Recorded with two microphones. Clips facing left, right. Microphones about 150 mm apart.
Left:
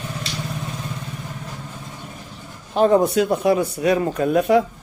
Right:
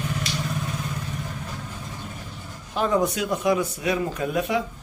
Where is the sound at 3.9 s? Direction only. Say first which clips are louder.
Left 7 dB; 50° left (ahead or behind).